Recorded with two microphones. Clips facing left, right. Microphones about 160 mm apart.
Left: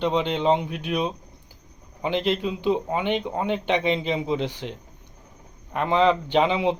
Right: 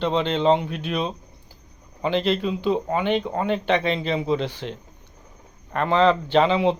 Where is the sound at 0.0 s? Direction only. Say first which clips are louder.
Right 2 dB; 15° left (ahead or behind).